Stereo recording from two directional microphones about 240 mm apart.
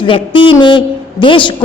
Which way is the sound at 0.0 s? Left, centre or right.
Left.